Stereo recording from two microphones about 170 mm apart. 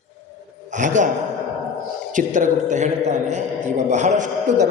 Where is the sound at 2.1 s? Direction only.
50° right (ahead or behind).